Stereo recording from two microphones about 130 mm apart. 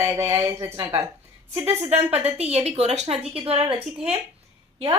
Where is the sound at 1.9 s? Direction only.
55° right (ahead or behind).